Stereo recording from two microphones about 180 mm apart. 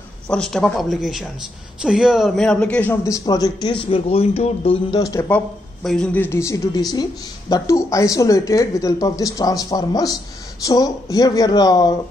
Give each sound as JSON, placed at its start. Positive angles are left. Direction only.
{"t": 0.3, "sound": "a man's voice", "side_deg": 5}
{"t": 5.0, "sound": "a man's voice", "side_deg": 15}
{"t": 5.9, "sound": "a woman's voice", "side_deg": 5}